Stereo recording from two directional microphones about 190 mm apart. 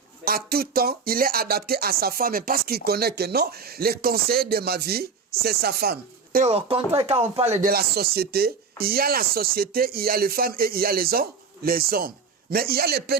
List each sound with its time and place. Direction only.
0.3 s speech: 55° right (ahead or behind)
6.4 s speech: 30° right (ahead or behind)
7.7 s speech: 55° right (ahead or behind)